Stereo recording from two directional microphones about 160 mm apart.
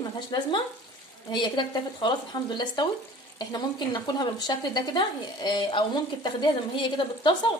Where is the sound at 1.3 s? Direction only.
30° left (ahead or behind).